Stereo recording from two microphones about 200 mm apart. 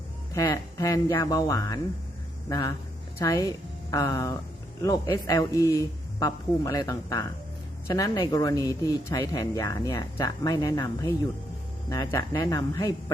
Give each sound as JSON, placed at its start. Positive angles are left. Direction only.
{"t": 0.3, "sound": "speech", "side_deg": 15}